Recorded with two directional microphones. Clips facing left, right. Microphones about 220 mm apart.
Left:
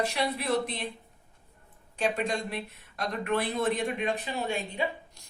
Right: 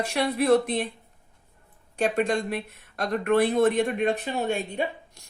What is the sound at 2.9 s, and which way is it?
Speech, 50° right (ahead or behind).